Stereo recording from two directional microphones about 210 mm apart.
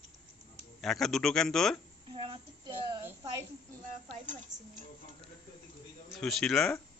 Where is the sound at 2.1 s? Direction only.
25° right (ahead or behind).